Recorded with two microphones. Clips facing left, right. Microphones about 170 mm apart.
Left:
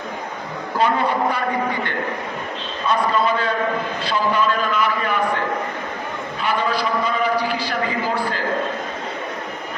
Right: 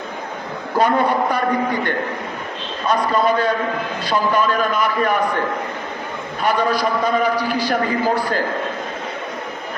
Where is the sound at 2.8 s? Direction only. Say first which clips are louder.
Right 2 dB; 40° right (ahead or behind).